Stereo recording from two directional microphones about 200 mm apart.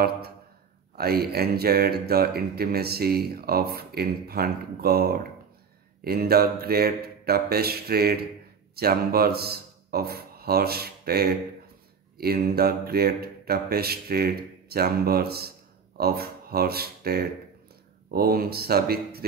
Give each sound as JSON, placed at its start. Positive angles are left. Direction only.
{"t": 0.9, "sound": "speech", "side_deg": -50}